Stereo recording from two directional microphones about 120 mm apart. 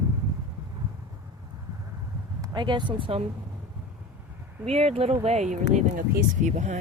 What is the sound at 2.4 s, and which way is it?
Speech, 35° right (ahead or behind).